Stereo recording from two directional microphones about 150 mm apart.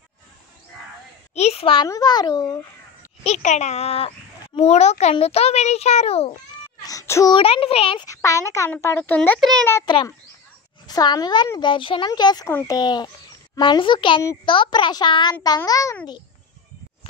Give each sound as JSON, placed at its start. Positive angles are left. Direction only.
{"t": 1.3, "sound": "a sound", "side_deg": 45}
{"t": 1.9, "sound": "a child's voice", "side_deg": 25}
{"t": 3.3, "sound": "a child's voice", "side_deg": 50}
{"t": 6.9, "sound": "meow", "side_deg": 20}
{"t": 7.3, "sound": "speech", "side_deg": 40}
{"t": 8.1, "sound": "a child's voice", "side_deg": 20}
{"t": 9.9, "sound": "speech", "side_deg": 30}